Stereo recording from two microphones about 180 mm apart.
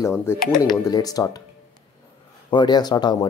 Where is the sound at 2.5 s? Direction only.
25° left (ahead or behind).